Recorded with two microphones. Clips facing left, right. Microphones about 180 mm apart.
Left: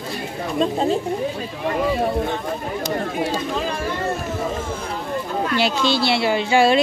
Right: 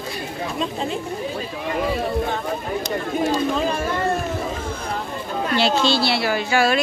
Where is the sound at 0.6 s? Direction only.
40° left (ahead or behind).